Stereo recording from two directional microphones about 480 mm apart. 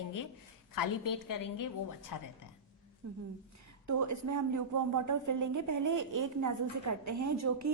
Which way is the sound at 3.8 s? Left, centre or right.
Right.